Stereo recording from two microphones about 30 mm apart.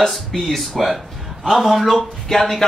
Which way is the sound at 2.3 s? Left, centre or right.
Left.